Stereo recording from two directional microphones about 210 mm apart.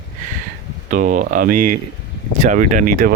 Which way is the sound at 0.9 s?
40° right (ahead or behind).